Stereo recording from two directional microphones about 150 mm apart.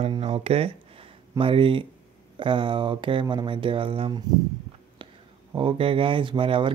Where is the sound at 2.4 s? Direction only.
35° right (ahead or behind).